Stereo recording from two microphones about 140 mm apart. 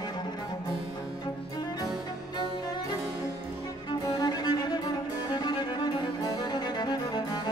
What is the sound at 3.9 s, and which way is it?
Music, 30° left (ahead or behind).